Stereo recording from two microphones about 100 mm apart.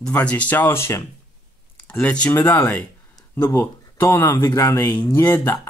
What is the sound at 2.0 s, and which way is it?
Speech, 10° left (ahead or behind).